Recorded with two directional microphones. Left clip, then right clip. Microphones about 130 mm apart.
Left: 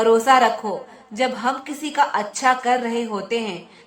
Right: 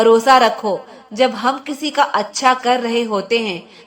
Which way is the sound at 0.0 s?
35° right (ahead or behind).